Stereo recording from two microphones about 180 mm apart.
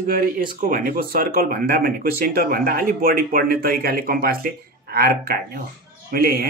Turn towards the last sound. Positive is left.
turn(degrees=-55)  # may be behind; listen again after turning